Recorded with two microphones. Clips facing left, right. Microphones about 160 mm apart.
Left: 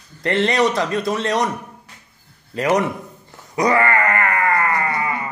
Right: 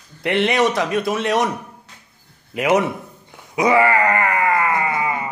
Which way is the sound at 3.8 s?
15° right (ahead or behind).